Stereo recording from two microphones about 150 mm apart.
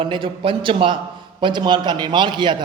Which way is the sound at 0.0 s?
35° right (ahead or behind).